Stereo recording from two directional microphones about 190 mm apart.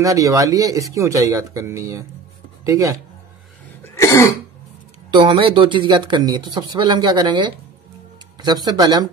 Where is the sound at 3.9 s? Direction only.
15° left (ahead or behind).